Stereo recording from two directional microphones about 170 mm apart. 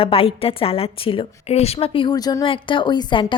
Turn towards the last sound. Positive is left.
turn(degrees=30)  # may be behind; listen again after turning